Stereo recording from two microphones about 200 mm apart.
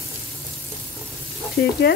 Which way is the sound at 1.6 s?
55° left (ahead or behind).